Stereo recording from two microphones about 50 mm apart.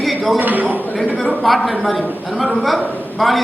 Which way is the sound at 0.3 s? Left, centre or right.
Right.